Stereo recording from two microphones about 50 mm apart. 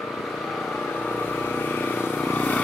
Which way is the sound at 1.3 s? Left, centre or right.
Left.